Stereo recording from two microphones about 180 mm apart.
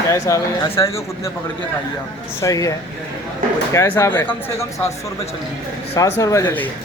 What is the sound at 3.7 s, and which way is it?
A man's voice, 15° left (ahead or behind).